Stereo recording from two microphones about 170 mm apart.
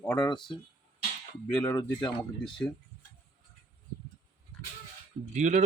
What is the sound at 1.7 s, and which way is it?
Speech, 20° left (ahead or behind).